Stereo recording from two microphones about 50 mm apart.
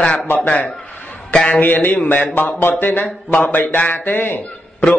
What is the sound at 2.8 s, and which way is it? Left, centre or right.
A man's voice, left.